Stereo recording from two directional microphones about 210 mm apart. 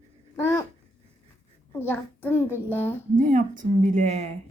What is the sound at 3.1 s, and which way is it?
Speech, 40° right (ahead or behind).